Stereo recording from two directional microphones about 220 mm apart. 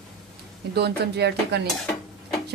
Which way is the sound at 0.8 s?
50° right (ahead or behind).